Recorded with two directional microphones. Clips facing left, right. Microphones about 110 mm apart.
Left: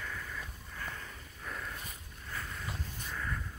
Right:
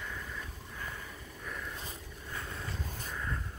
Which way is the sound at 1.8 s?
30° right (ahead or behind).